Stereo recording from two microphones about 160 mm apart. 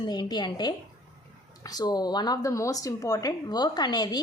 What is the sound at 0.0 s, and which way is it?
A woman's voice, 25° left (ahead or behind).